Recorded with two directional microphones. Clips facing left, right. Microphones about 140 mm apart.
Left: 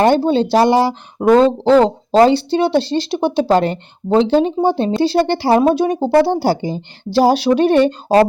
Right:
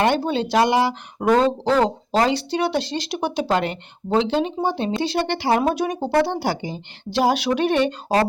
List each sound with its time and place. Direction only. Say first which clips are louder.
0.0 s speech: left 7 dB; 30° left (ahead or behind)